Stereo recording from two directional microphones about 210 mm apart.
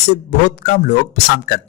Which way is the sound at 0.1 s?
50° left (ahead or behind).